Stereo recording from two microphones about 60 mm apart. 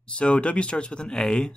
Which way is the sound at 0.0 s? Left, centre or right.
Centre.